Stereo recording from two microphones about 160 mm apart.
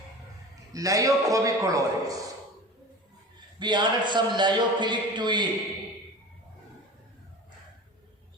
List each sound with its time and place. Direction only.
0.7 s a man's voice: 20° right (ahead or behind)
3.6 s a man's voice: 30° right (ahead or behind)